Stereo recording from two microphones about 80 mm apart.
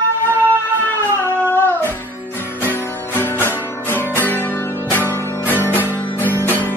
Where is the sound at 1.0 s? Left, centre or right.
Left.